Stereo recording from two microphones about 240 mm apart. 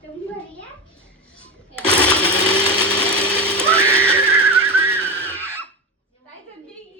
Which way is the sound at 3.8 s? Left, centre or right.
Centre.